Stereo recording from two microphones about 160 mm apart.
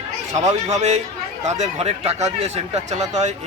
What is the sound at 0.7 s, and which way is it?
Speech, 45° right (ahead or behind).